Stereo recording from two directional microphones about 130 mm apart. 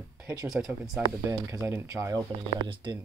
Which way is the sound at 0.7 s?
5° right (ahead or behind).